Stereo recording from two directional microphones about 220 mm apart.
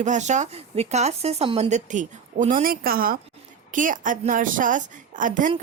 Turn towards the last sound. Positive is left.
turn(degrees=-35)  # may be behind; listen again after turning